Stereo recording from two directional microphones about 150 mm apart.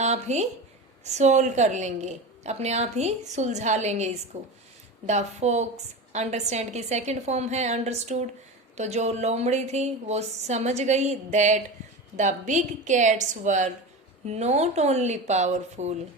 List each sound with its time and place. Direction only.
0.0 s a woman's voice: 50° right (ahead or behind)